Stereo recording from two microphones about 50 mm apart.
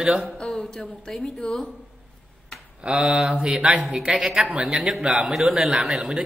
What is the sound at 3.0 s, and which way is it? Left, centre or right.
Speech, centre.